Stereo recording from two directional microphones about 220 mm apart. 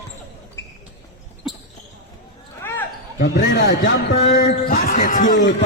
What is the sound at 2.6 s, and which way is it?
Basketball bounce, 10° left (ahead or behind).